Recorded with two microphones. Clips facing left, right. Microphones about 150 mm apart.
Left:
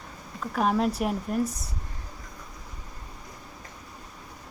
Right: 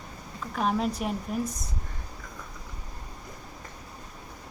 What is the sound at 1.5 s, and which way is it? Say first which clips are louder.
Speech: even; 30° left (ahead or behind).